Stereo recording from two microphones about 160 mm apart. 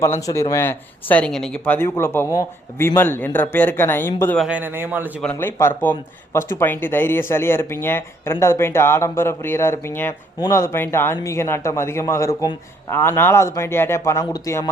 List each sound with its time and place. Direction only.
0.0 s speech: 15° left (ahead or behind)
4.4 s a man's voice: 5° right (ahead or behind)
5.2 s speech: 10° left (ahead or behind)